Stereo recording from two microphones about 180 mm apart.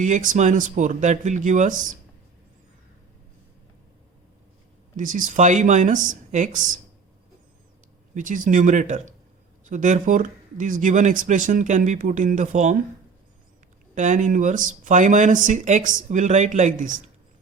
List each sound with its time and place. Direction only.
0.0 s speech: 45° right (ahead or behind)
4.9 s speech: 45° right (ahead or behind)
8.1 s speech: 45° right (ahead or behind)
13.9 s speech: 45° right (ahead or behind)